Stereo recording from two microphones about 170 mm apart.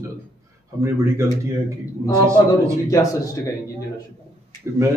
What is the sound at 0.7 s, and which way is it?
Speech, 15° right (ahead or behind).